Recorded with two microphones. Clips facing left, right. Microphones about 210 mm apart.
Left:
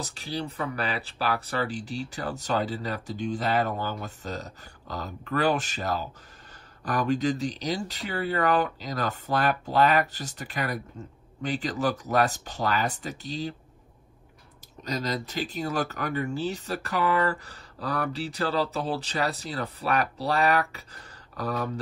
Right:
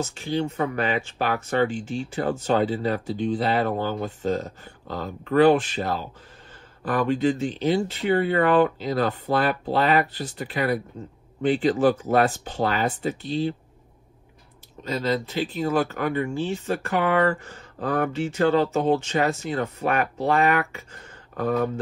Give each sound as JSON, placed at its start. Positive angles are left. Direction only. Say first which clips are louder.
{"t": 0.0, "sound": "speech", "louder": "right 7 dB", "side_deg": 35}
{"t": 3.5, "sound": "speech", "louder": "right 4 dB", "side_deg": -45}
{"t": 4.3, "sound": "speech", "louder": "right 12 dB", "side_deg": 40}
{"t": 9.8, "sound": "speech", "louder": "right 1 dB", "side_deg": -45}
{"t": 10.1, "sound": "speech", "louder": "right 6 dB", "side_deg": 45}
{"t": 14.9, "sound": "speech", "louder": "right 5 dB", "side_deg": 40}